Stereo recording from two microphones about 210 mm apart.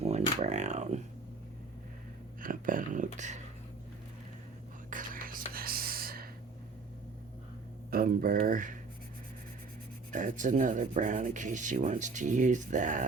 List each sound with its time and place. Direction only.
0.0 s a sound: 30° right (ahead or behind)
2.4 s whispering: 40° right (ahead or behind)
3.2 s speech: 35° right (ahead or behind)
4.9 s whispering: 40° right (ahead or behind)
7.9 s speech: 45° right (ahead or behind)
10.1 s speech: 40° right (ahead or behind)